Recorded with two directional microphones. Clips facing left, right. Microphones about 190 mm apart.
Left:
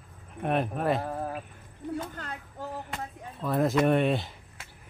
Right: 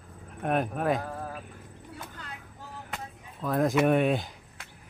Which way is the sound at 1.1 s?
25° left (ahead or behind).